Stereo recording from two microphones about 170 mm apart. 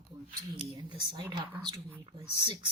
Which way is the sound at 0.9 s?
25° right (ahead or behind).